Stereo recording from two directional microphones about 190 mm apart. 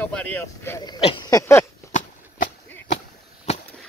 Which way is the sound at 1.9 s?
40° left (ahead or behind).